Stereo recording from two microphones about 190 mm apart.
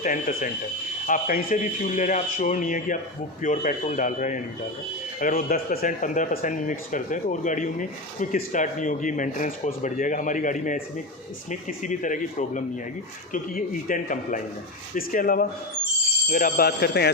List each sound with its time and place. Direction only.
0.0 s a man's voice: 45° left (ahead or behind)